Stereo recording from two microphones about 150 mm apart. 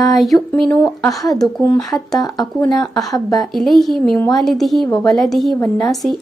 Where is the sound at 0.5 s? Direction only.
5° left (ahead or behind).